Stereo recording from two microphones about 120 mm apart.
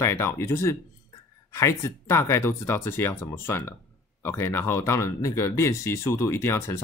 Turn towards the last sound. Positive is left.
turn(degrees=20)  # may be behind; listen again after turning